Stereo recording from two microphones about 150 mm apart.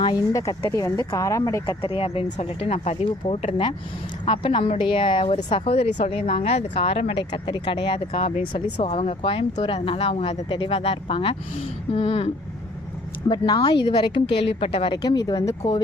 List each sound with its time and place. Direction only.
0.0 s speech: 25° left (ahead or behind)
1.8 s speech: 35° left (ahead or behind)
7.3 s speech: 30° left (ahead or behind)
13.2 s speech: 30° left (ahead or behind)
14.9 s speech: 25° left (ahead or behind)